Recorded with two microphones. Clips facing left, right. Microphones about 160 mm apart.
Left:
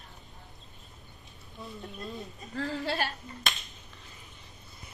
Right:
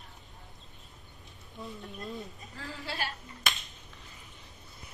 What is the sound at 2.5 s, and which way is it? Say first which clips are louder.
Speech: left 9 dB; 70° left (ahead or behind).